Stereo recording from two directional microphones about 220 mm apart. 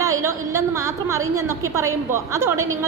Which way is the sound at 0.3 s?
15° right (ahead or behind).